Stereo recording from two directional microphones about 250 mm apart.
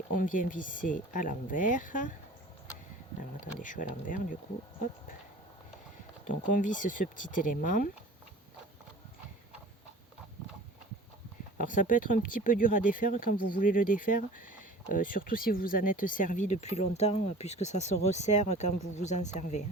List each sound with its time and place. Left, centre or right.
0.1 s speech: left
3.2 s speech: left
6.2 s speech: left
11.5 s speech: left